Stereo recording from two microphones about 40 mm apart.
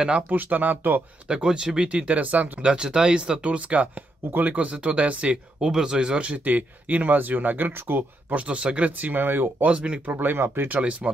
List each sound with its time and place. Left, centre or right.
0.3 s speech: right
1.3 s speech: right
2.2 s speech: right
2.6 s speech: right
4.3 s speech: right
5.6 s speech: centre
6.2 s speech: right
8.4 s speech: right
9.0 s speech: right
9.6 s speech: right
10.0 s speech: right
10.3 s speech: right
10.8 s speech: right